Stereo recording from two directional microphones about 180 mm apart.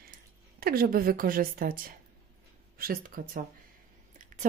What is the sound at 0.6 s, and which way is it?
A woman's voice, 55° right (ahead or behind).